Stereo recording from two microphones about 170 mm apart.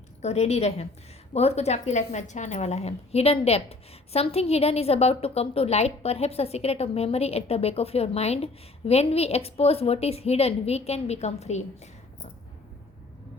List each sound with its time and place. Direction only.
0.2 s a woman's voice: 40° left (ahead or behind)